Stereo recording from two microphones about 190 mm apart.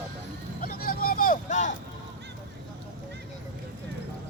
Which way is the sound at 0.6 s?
50° left (ahead or behind).